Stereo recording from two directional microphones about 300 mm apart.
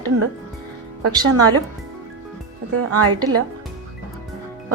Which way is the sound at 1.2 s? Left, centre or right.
Right.